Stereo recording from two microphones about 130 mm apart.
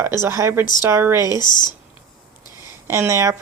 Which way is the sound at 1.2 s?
30° left (ahead or behind).